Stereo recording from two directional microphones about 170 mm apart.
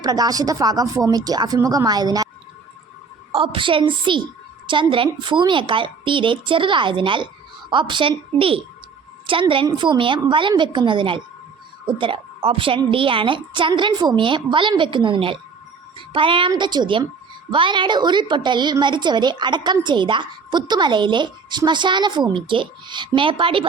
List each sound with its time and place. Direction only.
0.0 s a woman's voice: 20° right (ahead or behind)
3.3 s a woman's voice: 30° right (ahead or behind)